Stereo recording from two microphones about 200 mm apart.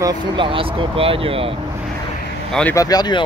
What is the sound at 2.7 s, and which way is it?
Speech, 20° left (ahead or behind).